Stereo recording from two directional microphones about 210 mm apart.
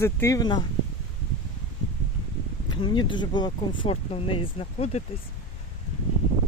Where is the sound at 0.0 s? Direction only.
15° left (ahead or behind).